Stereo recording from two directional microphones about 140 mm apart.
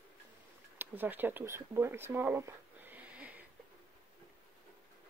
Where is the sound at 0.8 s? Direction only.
15° right (ahead or behind).